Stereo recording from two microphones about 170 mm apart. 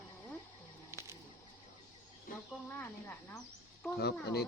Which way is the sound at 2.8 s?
15° left (ahead or behind).